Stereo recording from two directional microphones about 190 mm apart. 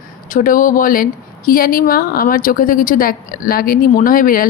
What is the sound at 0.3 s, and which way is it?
A woman's voice, 45° left (ahead or behind).